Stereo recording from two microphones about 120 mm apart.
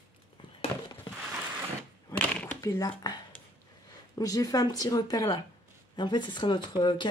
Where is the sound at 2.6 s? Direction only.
30° left (ahead or behind).